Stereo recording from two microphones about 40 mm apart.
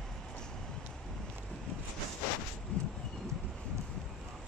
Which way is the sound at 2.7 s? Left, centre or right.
Left.